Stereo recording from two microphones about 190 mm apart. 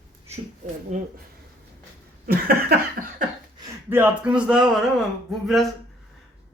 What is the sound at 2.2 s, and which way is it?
Cough, 50° right (ahead or behind).